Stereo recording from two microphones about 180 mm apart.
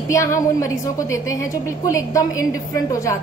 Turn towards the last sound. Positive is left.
turn(degrees=20)  # may be behind; listen again after turning